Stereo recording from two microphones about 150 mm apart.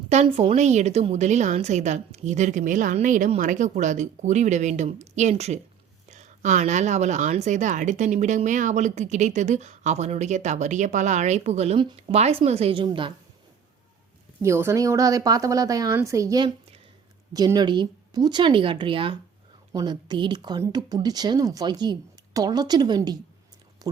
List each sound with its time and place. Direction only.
0.1 s speech: 45° right (ahead or behind)
14.4 s speech: 20° right (ahead or behind)